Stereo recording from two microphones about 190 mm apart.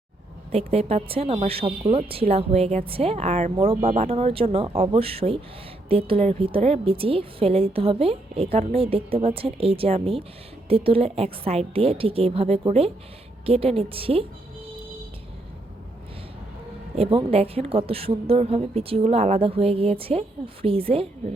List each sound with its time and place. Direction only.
0.5 s a woman's voice: 30° right (ahead or behind)
16.9 s a woman's voice: 30° right (ahead or behind)